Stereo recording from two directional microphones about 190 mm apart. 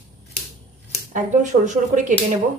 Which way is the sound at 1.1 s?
40° right (ahead or behind).